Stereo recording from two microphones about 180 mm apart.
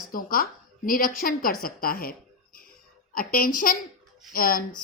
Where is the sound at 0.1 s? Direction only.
55° left (ahead or behind).